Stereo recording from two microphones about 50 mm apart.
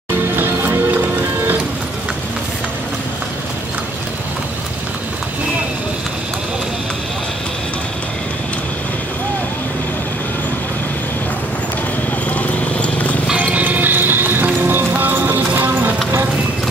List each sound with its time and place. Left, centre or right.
0.4 s music: right
12.3 s clip-clop: left
13.4 s music: right